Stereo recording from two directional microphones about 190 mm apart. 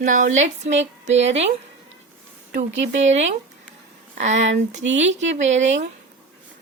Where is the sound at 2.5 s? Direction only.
40° right (ahead or behind).